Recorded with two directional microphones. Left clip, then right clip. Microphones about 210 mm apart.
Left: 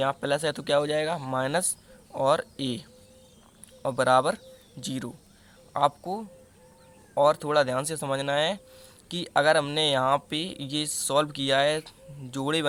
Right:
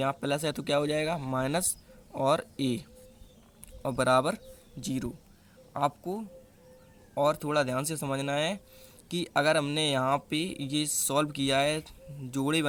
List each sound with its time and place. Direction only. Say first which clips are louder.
0.0 s speech: left 4 dB; 25° right (ahead or behind)
3.8 s speech: left 3 dB; 30° right (ahead or behind)